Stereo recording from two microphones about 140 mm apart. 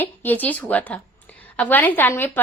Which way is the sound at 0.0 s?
15° left (ahead or behind).